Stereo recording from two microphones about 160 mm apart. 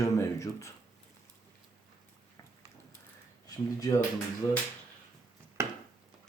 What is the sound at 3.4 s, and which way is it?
Speech, 25° left (ahead or behind).